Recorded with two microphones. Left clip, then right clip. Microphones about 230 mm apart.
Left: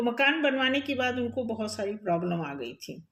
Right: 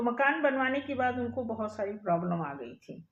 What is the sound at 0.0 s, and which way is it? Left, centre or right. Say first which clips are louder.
Speech: left 2 dB; left.